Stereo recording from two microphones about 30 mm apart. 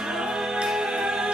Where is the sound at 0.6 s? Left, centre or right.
Right.